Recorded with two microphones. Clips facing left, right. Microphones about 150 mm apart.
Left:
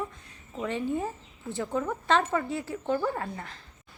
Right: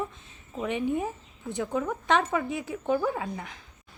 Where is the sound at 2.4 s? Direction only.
20° right (ahead or behind).